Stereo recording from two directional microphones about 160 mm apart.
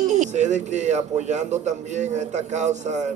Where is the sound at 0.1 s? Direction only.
50° right (ahead or behind).